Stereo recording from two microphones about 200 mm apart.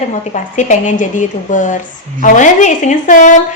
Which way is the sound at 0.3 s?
40° left (ahead or behind).